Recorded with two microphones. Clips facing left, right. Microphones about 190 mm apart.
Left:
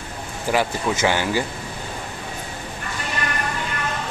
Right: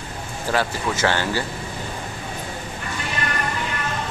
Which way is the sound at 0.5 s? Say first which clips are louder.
Left 2 dB; 15° left (ahead or behind).